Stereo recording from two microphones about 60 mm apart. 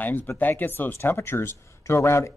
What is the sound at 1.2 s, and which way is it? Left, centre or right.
Speech, left.